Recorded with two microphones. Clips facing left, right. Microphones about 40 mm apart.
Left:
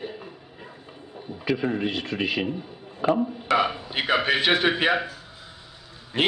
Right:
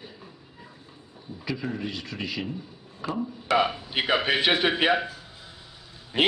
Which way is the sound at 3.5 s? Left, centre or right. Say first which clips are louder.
Even; centre.